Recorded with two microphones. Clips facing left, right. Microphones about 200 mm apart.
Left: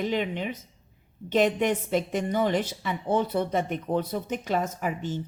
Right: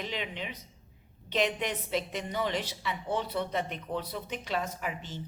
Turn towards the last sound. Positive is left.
turn(degrees=45)  # may be behind; listen again after turning